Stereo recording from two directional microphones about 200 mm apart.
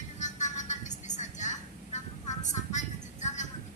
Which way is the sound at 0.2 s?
35° left (ahead or behind).